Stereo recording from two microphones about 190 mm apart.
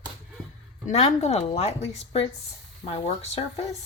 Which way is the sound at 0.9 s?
35° left (ahead or behind).